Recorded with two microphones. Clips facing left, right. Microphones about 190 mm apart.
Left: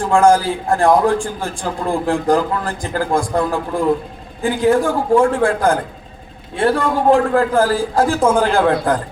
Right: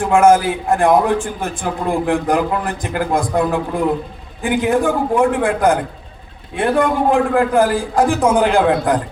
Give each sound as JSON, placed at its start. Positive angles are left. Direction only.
{"t": 0.0, "sound": "a man's voice", "side_deg": -20}